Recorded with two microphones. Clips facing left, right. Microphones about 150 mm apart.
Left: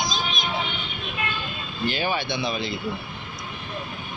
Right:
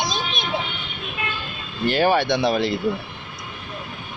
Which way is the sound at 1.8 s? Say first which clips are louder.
Right 8 dB; 65° right (ahead or behind).